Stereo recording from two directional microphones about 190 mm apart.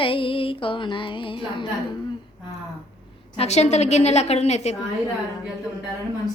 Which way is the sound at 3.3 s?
35° left (ahead or behind).